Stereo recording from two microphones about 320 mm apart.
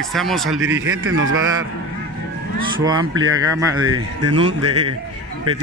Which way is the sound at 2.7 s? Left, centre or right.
Centre.